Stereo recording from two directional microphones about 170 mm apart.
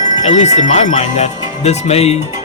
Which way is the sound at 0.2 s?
40° left (ahead or behind).